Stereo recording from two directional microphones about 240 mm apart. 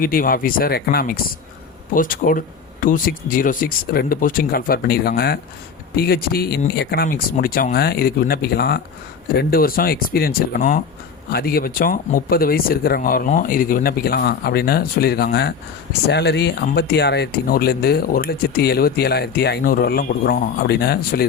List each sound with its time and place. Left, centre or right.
0.0 s speech: left